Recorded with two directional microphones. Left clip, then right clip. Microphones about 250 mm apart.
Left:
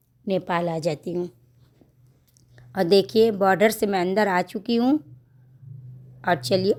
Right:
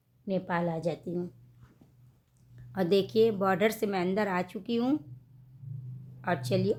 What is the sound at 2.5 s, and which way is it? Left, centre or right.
A woman's voice, left.